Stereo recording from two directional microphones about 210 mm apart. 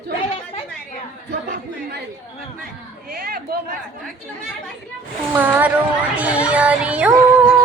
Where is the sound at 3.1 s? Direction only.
45° right (ahead or behind).